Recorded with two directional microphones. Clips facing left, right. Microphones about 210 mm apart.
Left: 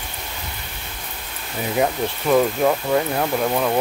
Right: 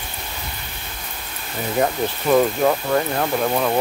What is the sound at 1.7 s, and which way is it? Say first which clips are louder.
Speech: right 1 dB; centre (ahead or behind).